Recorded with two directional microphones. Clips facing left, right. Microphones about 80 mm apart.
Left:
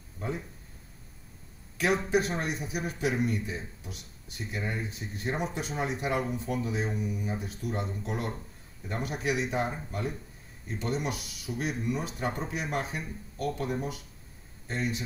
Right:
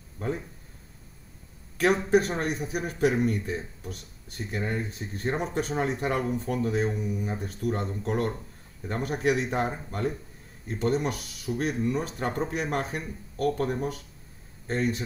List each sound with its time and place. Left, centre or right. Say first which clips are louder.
2.0 s speech: right 4 dB; right